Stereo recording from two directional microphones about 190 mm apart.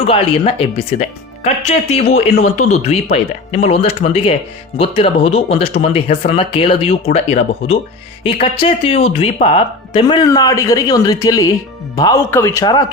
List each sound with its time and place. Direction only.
0.0 s speech: 30° left (ahead or behind)